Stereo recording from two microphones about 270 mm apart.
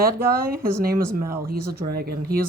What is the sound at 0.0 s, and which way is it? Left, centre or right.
Speech, right.